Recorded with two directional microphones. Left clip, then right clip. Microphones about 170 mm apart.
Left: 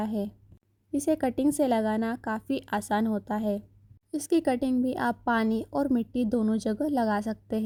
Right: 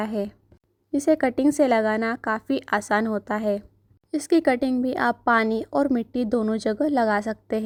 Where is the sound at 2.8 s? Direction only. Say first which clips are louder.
Right 5 dB; 25° right (ahead or behind).